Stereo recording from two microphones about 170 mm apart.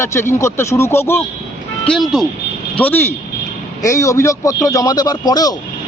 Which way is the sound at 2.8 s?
10° left (ahead or behind).